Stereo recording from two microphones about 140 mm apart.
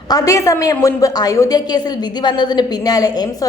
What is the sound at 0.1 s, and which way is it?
A woman's voice, 25° left (ahead or behind).